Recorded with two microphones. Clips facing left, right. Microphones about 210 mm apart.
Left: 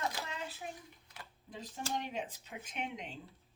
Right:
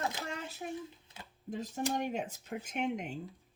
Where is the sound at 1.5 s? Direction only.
45° right (ahead or behind).